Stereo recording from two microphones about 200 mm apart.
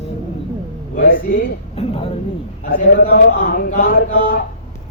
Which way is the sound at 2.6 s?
45° left (ahead or behind).